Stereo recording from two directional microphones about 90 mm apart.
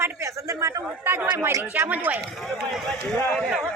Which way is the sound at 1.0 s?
25° right (ahead or behind).